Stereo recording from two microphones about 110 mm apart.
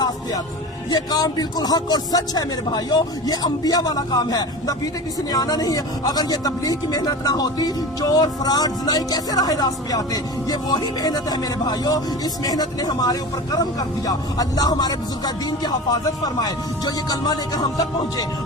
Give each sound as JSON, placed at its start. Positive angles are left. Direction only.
{"t": 0.9, "sound": "speech", "side_deg": 35}